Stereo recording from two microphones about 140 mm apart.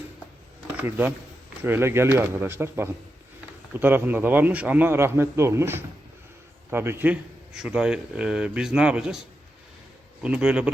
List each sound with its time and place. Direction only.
0.8 s a man's voice: 15° right (ahead or behind)
10.2 s a man's voice: 10° right (ahead or behind)